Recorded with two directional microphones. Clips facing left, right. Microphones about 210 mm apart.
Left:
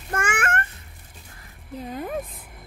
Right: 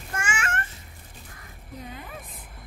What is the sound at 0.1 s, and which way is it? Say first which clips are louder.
Babbling: left 5 dB; 55° left (ahead or behind).